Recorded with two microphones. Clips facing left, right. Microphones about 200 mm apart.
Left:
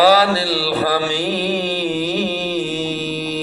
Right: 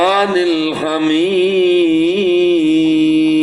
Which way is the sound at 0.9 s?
20° right (ahead or behind).